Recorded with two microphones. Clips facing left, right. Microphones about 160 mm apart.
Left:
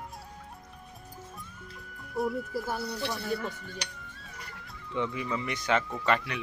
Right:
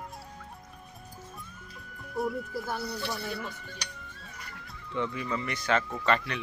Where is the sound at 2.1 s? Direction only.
Centre (ahead or behind).